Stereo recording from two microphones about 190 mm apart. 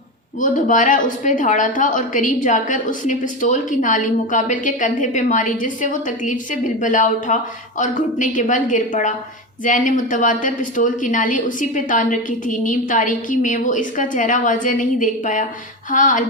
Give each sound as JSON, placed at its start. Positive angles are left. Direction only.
{"t": 0.3, "sound": "a woman's voice", "side_deg": 45}